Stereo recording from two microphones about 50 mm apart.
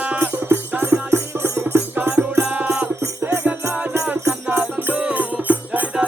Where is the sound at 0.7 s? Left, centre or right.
Right.